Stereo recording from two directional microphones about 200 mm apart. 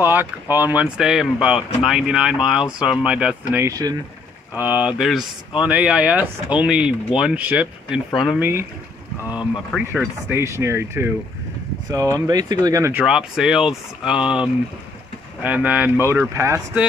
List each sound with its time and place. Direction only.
0.0 s speech: 10° right (ahead or behind)
3.5 s speech: 15° right (ahead or behind)
9.8 s speech: 5° right (ahead or behind)
13.0 s speech: 5° right (ahead or behind)